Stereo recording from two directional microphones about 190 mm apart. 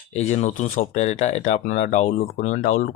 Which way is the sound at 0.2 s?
35° left (ahead or behind).